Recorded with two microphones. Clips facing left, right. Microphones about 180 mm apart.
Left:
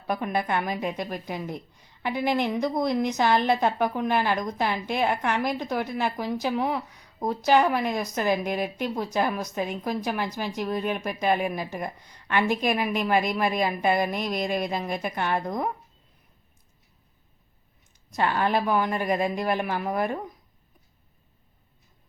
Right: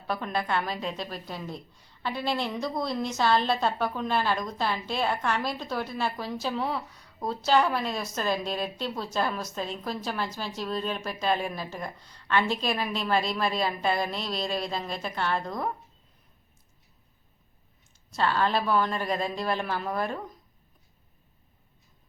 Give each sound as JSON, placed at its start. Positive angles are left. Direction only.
{"t": 0.1, "sound": "a woman's voice", "side_deg": 15}
{"t": 18.1, "sound": "a woman's voice", "side_deg": 15}